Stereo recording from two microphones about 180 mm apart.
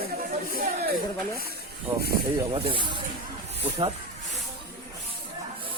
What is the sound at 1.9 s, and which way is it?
Speech, 35° right (ahead or behind).